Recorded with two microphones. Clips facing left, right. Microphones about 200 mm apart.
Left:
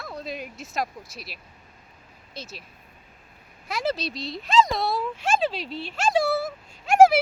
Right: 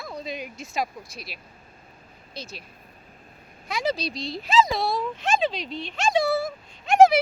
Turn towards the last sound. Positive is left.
turn(degrees=5)  # may be behind; listen again after turning